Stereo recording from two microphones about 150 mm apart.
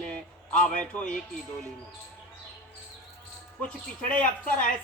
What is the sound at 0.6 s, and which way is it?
Speech, 5° left (ahead or behind).